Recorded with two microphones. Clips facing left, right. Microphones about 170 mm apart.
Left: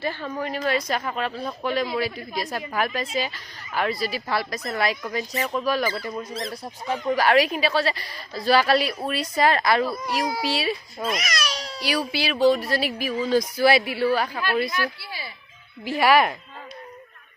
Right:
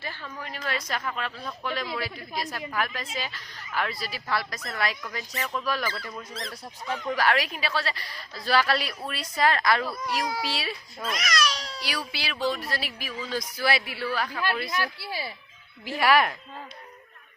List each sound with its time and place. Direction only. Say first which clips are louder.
0.0 s a woman's voice: left 10 dB; 60° left (ahead or behind)
0.4 s a woman's voice: left 8 dB; 20° left (ahead or behind)
14.1 s a woman's voice: left 3 dB; 30° left (ahead or behind)
14.7 s speech: left 2 dB; 35° right (ahead or behind)
15.8 s speech: left 4 dB; 10° left (ahead or behind)